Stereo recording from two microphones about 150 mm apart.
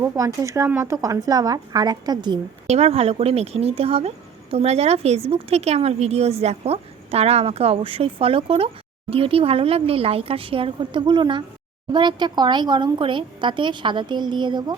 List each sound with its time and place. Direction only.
0.0 s speech: 20° right (ahead or behind)
2.6 s a woman's voice: 45° right (ahead or behind)